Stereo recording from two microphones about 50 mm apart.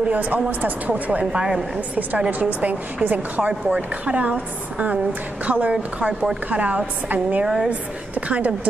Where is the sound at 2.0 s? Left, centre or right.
Right.